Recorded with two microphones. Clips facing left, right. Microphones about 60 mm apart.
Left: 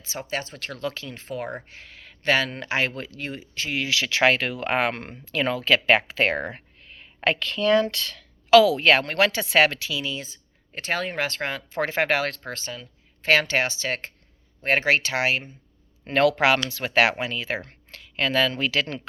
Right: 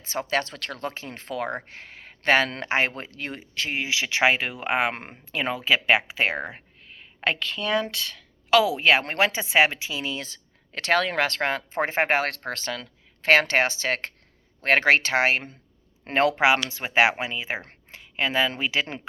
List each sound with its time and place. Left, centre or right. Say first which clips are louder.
0.0 s speech: right 5 dB; right
3.8 s speech: left 2 dB; centre
9.9 s speech: left 1 dB; right
10.2 s speech: right 2 dB; right
11.8 s speech: even; right
12.3 s speech: right 3 dB; right
13.2 s speech: right 2 dB; right
16.1 s speech: left 1 dB; right